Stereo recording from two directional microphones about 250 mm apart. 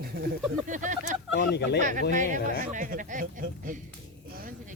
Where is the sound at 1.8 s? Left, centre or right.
Right.